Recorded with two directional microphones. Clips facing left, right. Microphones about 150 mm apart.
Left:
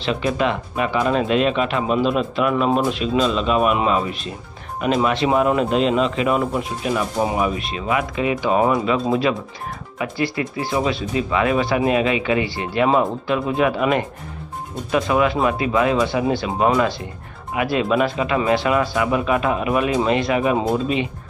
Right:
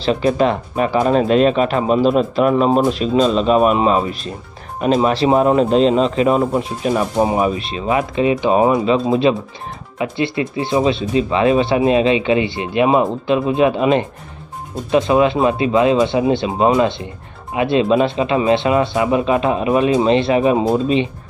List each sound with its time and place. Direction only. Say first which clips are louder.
0.0 s speech: right 5 dB; 35° right (ahead or behind)